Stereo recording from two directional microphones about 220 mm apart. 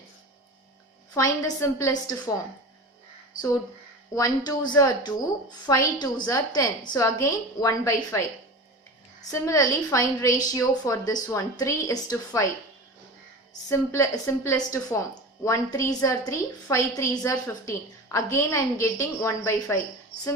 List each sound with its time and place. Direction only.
1.1 s a woman's voice: 15° left (ahead or behind)
4.1 s a woman's voice: 15° left (ahead or behind)
9.3 s a woman's voice: 15° left (ahead or behind)
13.7 s a woman's voice: 15° left (ahead or behind)